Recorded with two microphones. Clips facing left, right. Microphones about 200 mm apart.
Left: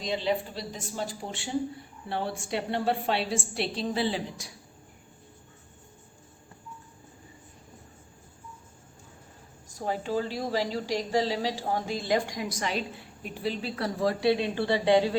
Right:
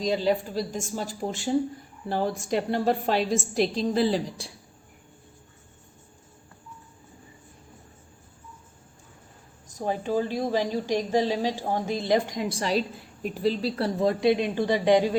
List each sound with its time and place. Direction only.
0.0 s a woman's voice: 40° right (ahead or behind)
9.6 s speech: 20° right (ahead or behind)